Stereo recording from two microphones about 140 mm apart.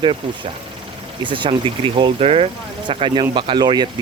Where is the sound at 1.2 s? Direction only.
35° right (ahead or behind).